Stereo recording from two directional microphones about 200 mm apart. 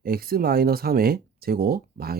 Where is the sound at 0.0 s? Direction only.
50° right (ahead or behind).